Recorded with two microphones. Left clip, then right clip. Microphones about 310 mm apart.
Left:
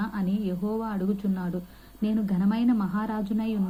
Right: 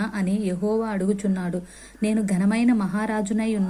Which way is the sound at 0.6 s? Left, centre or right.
Right.